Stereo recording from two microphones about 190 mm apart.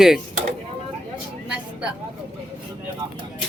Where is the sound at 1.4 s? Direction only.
5° right (ahead or behind).